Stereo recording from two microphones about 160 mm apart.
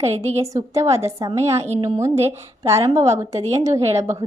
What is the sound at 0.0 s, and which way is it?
Speech, 45° right (ahead or behind).